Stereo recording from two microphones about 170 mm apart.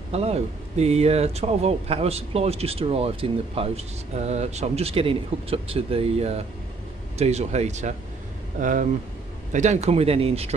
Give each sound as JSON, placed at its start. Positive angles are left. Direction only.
{"t": 0.1, "sound": "speech", "side_deg": -35}